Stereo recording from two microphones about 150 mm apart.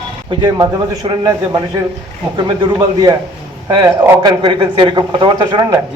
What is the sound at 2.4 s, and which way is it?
Speech, 30° right (ahead or behind).